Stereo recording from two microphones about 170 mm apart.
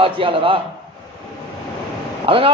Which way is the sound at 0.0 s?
30° right (ahead or behind).